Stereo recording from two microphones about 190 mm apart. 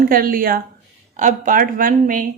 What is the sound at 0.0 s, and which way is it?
A woman's voice, 50° right (ahead or behind).